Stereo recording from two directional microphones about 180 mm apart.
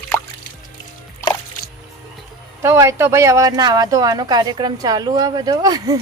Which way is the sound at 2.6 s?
15° right (ahead or behind).